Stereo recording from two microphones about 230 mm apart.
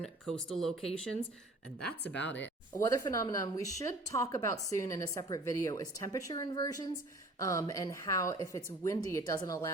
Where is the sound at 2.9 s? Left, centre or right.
Centre.